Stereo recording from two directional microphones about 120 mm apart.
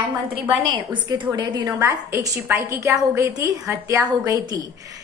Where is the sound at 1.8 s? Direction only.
25° right (ahead or behind).